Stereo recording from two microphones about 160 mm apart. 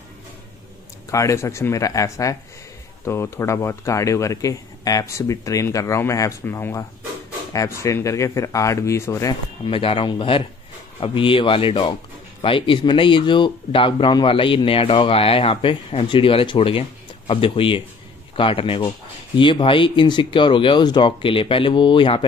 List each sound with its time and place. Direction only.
1.1 s speech: 20° left (ahead or behind)
9.3 s speech: 35° left (ahead or behind)